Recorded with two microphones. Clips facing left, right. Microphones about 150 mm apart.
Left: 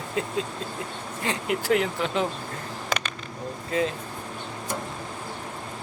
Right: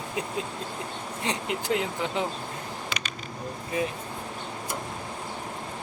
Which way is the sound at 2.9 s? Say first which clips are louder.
Left 10 dB; 45° left (ahead or behind).